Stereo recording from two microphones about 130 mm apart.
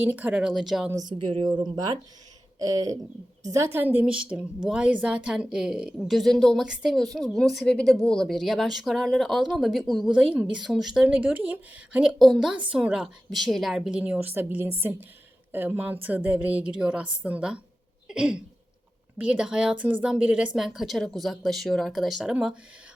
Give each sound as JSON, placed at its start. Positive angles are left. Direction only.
{"t": 0.0, "sound": "a woman's voice", "side_deg": -15}
{"t": 0.9, "sound": "a woman's voice", "side_deg": -30}